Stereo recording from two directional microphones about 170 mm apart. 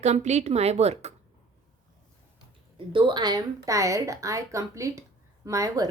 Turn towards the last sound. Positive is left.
turn(degrees=-20)  # may be behind; listen again after turning